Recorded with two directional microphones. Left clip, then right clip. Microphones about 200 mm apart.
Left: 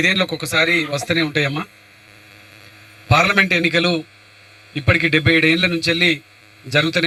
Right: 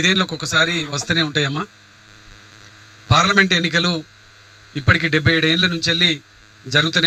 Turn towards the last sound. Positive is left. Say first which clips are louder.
# even
turn(degrees=-45)  # may be behind; listen again after turning